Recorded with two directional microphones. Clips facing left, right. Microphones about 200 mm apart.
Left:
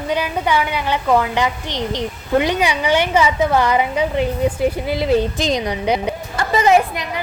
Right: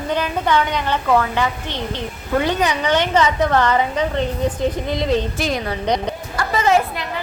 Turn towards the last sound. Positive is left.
turn(degrees=15)  # may be behind; listen again after turning